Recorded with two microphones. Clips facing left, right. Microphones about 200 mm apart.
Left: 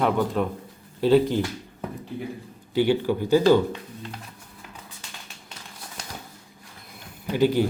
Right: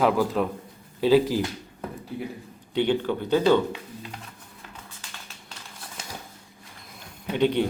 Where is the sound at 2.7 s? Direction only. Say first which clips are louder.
Left 2 dB; 5° left (ahead or behind).